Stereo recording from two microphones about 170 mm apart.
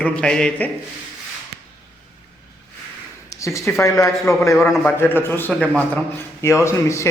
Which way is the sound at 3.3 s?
20° left (ahead or behind).